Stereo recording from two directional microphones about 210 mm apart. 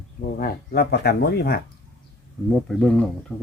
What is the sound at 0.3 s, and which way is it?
Speech, 45° left (ahead or behind).